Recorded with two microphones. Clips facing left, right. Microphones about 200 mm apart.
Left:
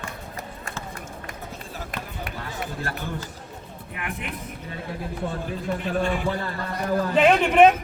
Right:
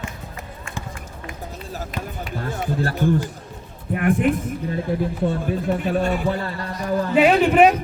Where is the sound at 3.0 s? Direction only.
50° right (ahead or behind).